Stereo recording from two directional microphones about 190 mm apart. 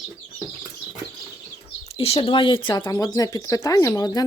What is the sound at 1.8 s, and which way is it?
Speech, 30° left (ahead or behind).